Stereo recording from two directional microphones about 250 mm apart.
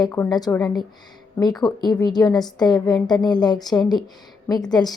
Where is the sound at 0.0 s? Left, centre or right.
Centre.